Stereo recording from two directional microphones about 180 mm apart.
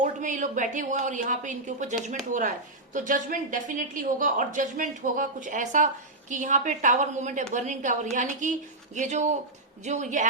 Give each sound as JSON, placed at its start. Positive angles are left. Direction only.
{"t": 0.0, "sound": "a woman's voice", "side_deg": -45}